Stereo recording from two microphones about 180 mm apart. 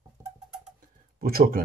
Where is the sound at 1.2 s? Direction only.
55° right (ahead or behind).